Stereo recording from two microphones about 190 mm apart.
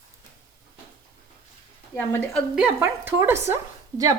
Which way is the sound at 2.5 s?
10° right (ahead or behind).